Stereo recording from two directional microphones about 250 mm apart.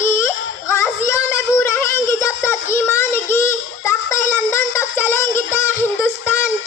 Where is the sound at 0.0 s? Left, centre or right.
Centre.